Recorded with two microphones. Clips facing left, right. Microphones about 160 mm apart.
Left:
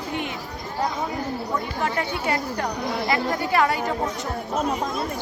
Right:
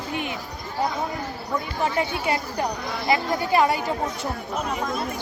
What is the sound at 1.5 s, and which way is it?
Speech, 20° right (ahead or behind).